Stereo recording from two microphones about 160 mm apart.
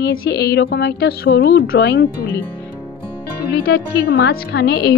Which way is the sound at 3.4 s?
80° left.